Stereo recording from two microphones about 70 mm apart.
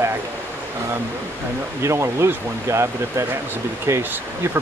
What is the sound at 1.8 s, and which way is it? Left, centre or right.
Speech, right.